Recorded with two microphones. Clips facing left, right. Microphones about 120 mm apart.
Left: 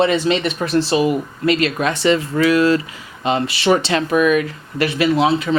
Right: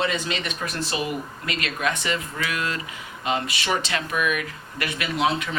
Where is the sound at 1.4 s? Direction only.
30° left (ahead or behind).